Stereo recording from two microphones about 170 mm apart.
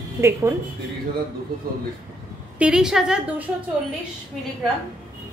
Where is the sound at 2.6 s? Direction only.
5° right (ahead or behind).